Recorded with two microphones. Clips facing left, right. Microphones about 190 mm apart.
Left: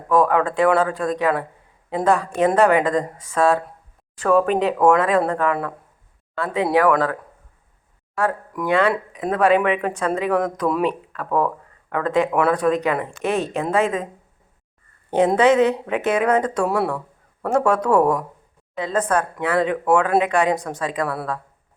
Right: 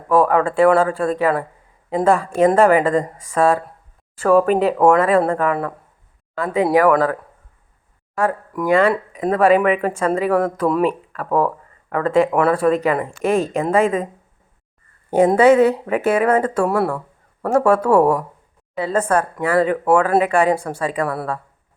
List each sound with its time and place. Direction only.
0.1 s speech: 5° right (ahead or behind)
8.2 s speech: 5° right (ahead or behind)
15.1 s speech: 10° right (ahead or behind)